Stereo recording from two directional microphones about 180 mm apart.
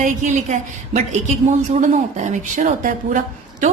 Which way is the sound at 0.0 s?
40° right (ahead or behind).